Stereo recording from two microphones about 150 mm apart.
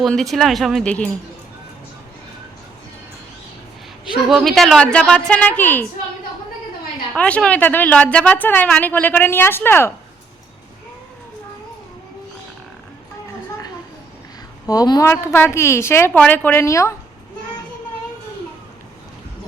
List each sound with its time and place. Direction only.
0.0 s speech: centre (ahead or behind)
4.1 s a woman's voice: centre (ahead or behind)
7.1 s a woman's voice: 10° left (ahead or behind)
14.7 s a woman's voice: 25° left (ahead or behind)